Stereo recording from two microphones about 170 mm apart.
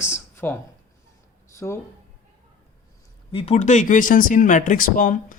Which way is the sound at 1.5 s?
15° left (ahead or behind).